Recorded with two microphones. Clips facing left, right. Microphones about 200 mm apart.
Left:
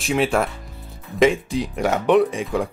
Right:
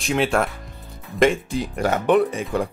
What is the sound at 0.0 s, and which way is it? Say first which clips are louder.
Speech: left 1 dB; centre (ahead or behind).